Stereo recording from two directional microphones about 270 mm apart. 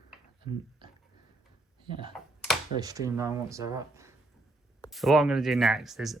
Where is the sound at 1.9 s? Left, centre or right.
Centre.